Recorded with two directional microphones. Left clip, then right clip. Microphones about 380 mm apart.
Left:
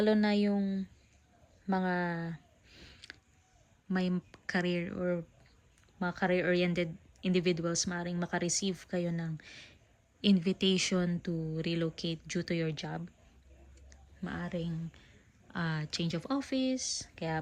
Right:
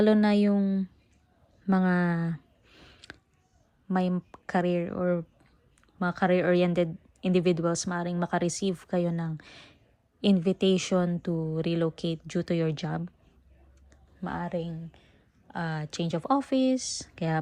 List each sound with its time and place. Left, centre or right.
0.0 s speech: centre
0.5 s speech: right
1.6 s a sound: centre
3.8 s speech: centre